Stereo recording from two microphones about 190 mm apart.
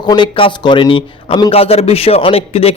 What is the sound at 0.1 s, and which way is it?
A man's voice, 25° left (ahead or behind).